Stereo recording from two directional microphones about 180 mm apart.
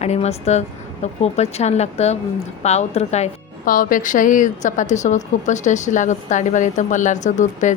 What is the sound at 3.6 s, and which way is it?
A woman's voice, 50° left (ahead or behind).